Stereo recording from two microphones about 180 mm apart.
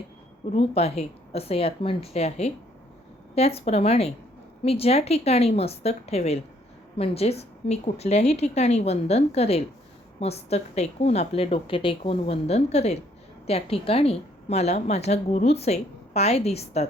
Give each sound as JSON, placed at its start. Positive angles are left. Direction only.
{"t": 0.5, "sound": "a woman's voice", "side_deg": 35}